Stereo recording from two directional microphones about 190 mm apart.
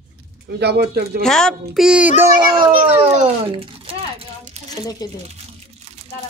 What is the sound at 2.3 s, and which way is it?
Speech, 25° right (ahead or behind).